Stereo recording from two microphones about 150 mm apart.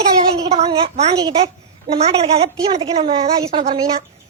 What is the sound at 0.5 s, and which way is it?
A woman's voice, 40° right (ahead or behind).